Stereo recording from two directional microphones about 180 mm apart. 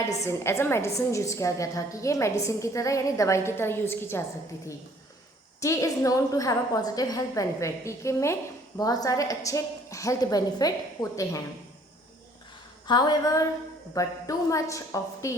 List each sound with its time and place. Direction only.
0.1 s a woman's voice: 15° left (ahead or behind)
5.5 s a woman's voice: 15° left (ahead or behind)
12.9 s a woman's voice: 20° left (ahead or behind)